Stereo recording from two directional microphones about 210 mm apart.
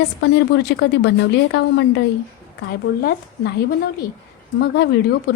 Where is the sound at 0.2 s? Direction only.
55° left (ahead or behind).